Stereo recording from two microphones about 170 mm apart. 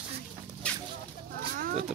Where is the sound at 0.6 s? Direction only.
5° left (ahead or behind).